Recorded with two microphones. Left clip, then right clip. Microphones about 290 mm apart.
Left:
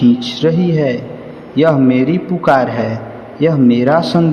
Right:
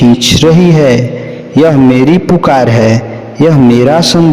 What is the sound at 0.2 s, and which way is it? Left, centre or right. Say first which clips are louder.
A man's voice: right 9 dB; right.